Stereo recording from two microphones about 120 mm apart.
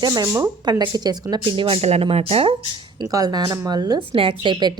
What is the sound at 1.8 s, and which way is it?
Speech, 55° right (ahead or behind).